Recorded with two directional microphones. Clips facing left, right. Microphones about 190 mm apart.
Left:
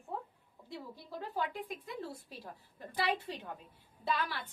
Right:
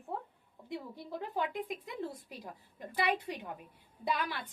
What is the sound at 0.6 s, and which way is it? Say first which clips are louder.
A woman's voice: right 4 dB; 20° right (ahead or behind).